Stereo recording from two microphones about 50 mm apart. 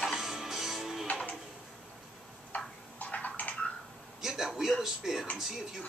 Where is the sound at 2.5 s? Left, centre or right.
Left.